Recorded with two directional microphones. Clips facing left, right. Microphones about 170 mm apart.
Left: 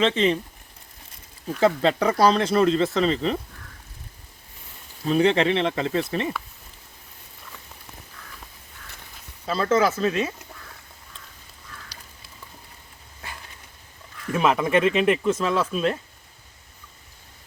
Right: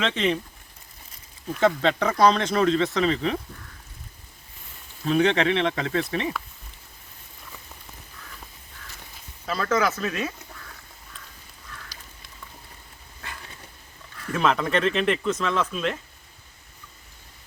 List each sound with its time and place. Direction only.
0.0 s speech: 30° left (ahead or behind)
1.5 s speech: 5° left (ahead or behind)
5.0 s speech: 5° left (ahead or behind)
9.5 s speech: 25° left (ahead or behind)
14.3 s speech: 10° left (ahead or behind)